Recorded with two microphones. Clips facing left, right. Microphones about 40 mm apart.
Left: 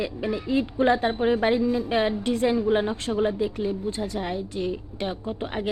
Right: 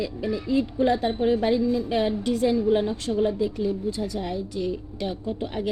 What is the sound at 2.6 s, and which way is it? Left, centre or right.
Speech, centre.